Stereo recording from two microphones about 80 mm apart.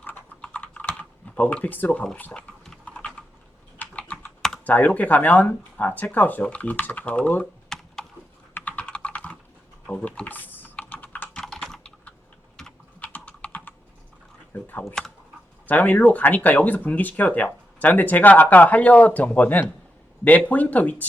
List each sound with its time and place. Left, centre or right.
0.0 s typing: left
4.6 s speech: left
7.7 s computer keyboard: centre
8.5 s typing: left
11.3 s computer keyboard: centre
12.6 s typing: centre
13.0 s computer keyboard: left
15.6 s speech: centre